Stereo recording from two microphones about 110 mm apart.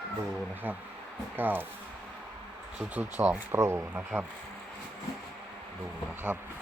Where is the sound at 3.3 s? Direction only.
25° right (ahead or behind).